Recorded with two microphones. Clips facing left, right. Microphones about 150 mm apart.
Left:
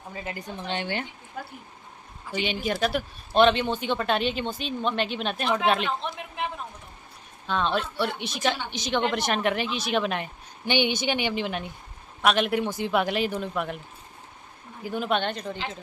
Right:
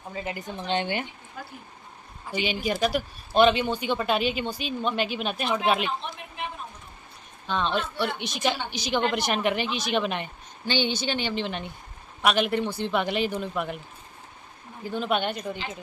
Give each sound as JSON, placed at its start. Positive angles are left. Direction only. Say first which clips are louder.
{"t": 0.1, "sound": "a woman's voice", "louder": "right 2 dB", "side_deg": -20}
{"t": 2.3, "sound": "speech", "louder": "even", "side_deg": -5}
{"t": 7.4, "sound": "speech", "louder": "left 1 dB", "side_deg": 0}
{"t": 10.7, "sound": "a woman's voice", "louder": "left 2 dB", "side_deg": 15}
{"t": 14.8, "sound": "a woman's voice", "louder": "even", "side_deg": 10}
{"t": 15.1, "sound": "a woman's voice", "louder": "even", "side_deg": -10}